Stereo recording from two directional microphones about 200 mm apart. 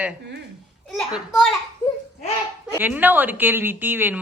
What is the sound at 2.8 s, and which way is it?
Speech, 10° right (ahead or behind).